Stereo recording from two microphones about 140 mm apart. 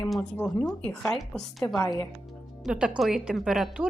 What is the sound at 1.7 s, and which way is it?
Speech, 25° left (ahead or behind).